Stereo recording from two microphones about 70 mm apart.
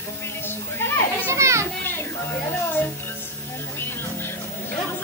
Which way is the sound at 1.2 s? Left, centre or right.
Right.